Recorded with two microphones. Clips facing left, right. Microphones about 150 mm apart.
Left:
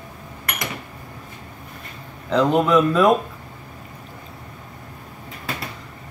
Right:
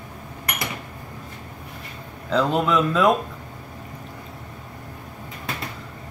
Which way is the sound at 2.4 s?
15° left (ahead or behind).